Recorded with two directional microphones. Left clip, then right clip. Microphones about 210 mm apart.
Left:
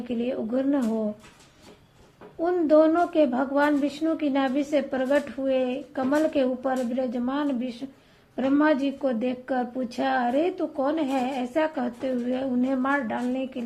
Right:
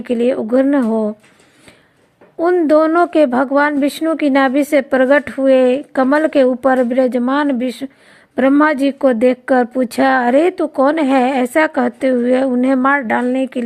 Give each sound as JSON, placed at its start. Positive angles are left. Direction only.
{"t": 0.0, "sound": "speech", "side_deg": -40}
{"t": 2.4, "sound": "a woman's voice", "side_deg": -40}